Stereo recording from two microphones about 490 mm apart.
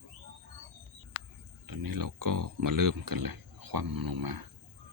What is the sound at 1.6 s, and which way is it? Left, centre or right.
Speech, right.